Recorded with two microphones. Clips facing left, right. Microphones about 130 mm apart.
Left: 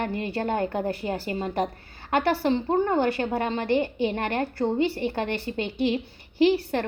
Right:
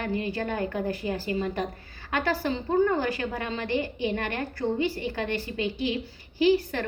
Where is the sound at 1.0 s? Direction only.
40° left (ahead or behind).